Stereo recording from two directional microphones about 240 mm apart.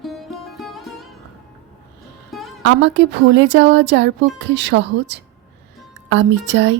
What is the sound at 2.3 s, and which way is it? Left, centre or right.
Music, centre.